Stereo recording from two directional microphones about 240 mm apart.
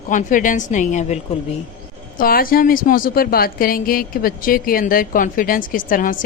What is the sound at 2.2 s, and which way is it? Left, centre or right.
A woman's voice, left.